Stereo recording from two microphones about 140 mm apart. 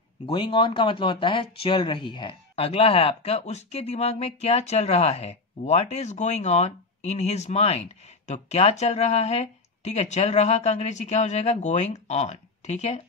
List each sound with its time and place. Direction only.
0.3 s speech: 35° left (ahead or behind); by 13.0 s 55° left (ahead or behind)